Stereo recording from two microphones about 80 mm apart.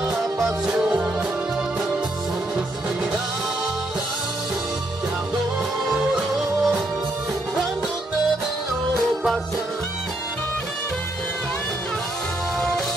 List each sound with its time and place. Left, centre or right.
0.1 s music: centre
6.1 s music: centre
12.5 s music: centre